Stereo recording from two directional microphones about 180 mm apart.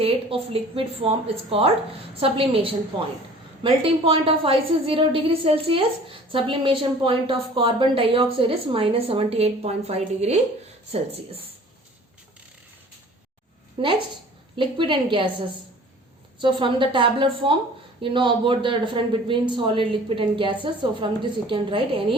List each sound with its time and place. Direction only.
0.0 s a woman's voice: 30° right (ahead or behind)
14.5 s a man's voice: 30° right (ahead or behind)
16.4 s a man's voice: 25° right (ahead or behind)